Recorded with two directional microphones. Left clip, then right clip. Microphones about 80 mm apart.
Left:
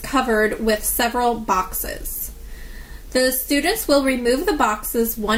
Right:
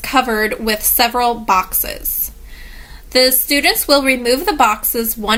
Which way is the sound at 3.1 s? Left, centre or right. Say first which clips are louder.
Right 6 dB; right.